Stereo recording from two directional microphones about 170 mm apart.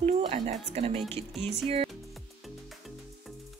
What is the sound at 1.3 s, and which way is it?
Music, centre (ahead or behind).